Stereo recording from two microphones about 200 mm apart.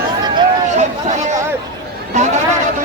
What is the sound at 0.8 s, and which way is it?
Chatter, 35° right (ahead or behind).